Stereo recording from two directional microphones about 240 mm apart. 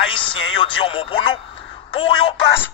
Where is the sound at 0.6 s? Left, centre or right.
Left.